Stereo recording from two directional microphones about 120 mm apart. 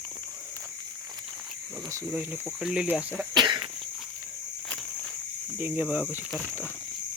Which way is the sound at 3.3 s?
35° right (ahead or behind).